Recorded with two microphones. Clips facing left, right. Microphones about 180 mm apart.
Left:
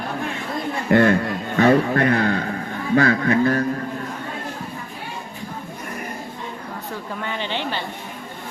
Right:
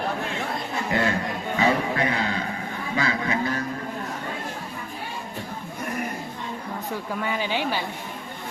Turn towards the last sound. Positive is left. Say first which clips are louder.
# even
turn(degrees=-10)  # may be behind; listen again after turning